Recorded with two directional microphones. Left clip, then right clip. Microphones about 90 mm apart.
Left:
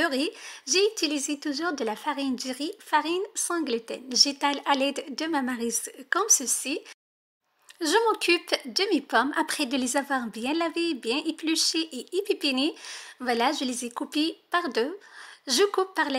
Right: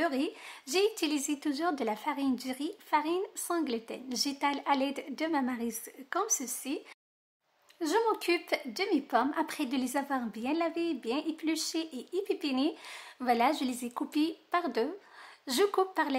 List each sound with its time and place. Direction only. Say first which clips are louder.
0.0 s speech: left 5 dB; 30° left (ahead or behind)
0.5 s a woman's voice: left 6 dB; 15° left (ahead or behind); by 6.8 s 30° left (ahead or behind)
8.0 s a woman's voice: left 5 dB; 30° left (ahead or behind)
12.8 s a woman's voice: left 1 dB; 15° left (ahead or behind)